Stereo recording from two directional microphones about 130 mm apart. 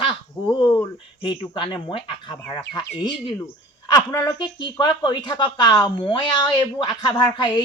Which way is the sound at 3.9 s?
30° left (ahead or behind).